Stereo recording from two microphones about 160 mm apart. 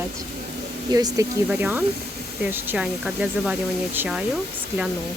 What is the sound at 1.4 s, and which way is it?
Speech, 10° right (ahead or behind).